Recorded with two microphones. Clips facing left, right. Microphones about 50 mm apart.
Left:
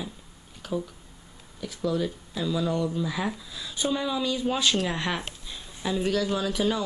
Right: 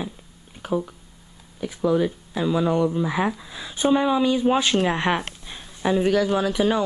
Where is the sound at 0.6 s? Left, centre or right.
Right.